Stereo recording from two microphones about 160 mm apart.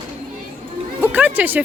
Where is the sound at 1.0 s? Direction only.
10° right (ahead or behind).